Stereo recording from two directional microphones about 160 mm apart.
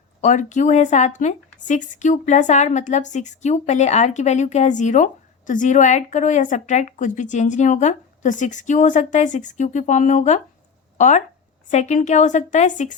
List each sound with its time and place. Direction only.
0.2 s speech: 50° left (ahead or behind)